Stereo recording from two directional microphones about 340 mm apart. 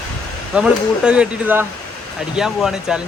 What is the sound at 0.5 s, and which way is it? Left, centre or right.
Speech, centre.